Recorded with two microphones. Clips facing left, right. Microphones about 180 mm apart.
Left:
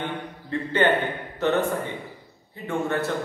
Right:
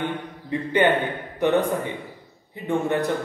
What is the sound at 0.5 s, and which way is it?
A man's voice, 15° right (ahead or behind).